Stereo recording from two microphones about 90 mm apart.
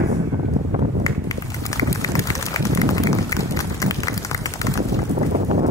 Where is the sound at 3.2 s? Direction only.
35° left (ahead or behind).